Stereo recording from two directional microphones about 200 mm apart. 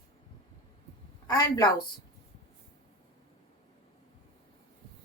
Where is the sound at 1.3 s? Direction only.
20° left (ahead or behind).